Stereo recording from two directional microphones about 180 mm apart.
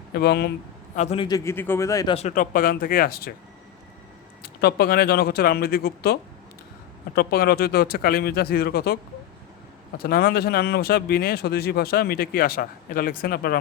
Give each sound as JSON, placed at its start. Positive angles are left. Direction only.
{"t": 0.1, "sound": "speech", "side_deg": 65}
{"t": 0.9, "sound": "a man's voice", "side_deg": 35}
{"t": 1.5, "sound": "speech", "side_deg": 10}
{"t": 2.1, "sound": "speech", "side_deg": 45}
{"t": 4.4, "sound": "speech", "side_deg": 60}
{"t": 7.2, "sound": "speech", "side_deg": 60}
{"t": 10.0, "sound": "speech", "side_deg": 55}